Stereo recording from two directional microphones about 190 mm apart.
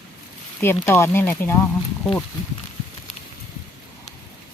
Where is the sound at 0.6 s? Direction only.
10° left (ahead or behind).